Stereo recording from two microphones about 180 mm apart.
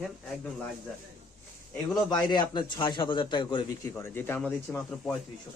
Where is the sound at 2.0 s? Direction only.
25° left (ahead or behind).